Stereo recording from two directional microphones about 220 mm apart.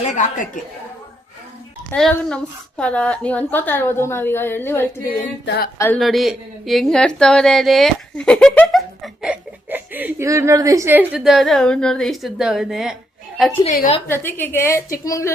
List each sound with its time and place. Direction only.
0.0 s a woman's voice: 35° left (ahead or behind)
1.9 s a woman's voice: 5° left (ahead or behind)
5.5 s a sound: 45° left (ahead or behind)
6.0 s speech: centre (ahead or behind)
9.2 s speech: 5° right (ahead or behind)
13.7 s a woman's voice: 30° left (ahead or behind)
14.1 s a woman's voice: 10° left (ahead or behind)